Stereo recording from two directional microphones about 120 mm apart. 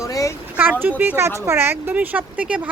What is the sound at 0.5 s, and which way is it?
Speech, 15° right (ahead or behind).